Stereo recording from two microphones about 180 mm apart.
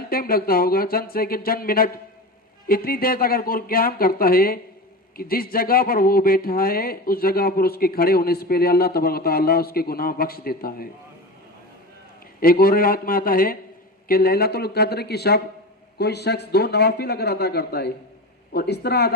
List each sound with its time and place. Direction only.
0.1 s speech: 55° left (ahead or behind)
12.4 s speech: 55° left (ahead or behind)